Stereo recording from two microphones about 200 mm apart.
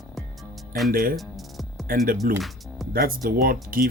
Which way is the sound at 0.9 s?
45° right (ahead or behind).